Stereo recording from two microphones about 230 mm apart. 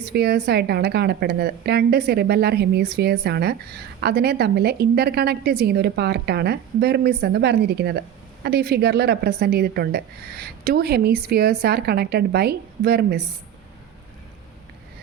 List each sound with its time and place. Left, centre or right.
0.0 s speech: right